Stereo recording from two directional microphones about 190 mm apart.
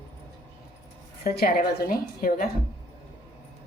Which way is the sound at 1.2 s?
50° left (ahead or behind).